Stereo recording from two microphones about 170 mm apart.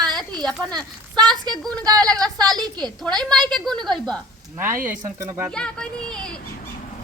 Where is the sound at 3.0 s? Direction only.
5° left (ahead or behind).